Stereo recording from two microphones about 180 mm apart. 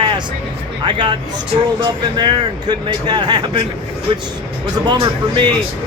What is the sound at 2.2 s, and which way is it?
Speech, 25° right (ahead or behind).